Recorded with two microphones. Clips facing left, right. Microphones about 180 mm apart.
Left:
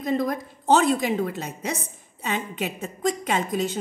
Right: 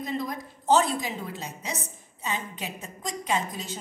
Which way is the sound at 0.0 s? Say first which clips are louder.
Left 7 dB; 60° left (ahead or behind).